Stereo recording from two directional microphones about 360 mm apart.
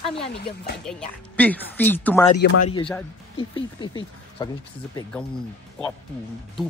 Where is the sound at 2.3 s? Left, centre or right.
Left.